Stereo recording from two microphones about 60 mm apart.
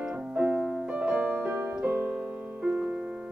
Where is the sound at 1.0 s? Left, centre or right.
Centre.